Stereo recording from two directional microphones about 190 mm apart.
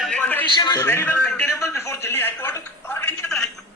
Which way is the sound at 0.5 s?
20° left (ahead or behind).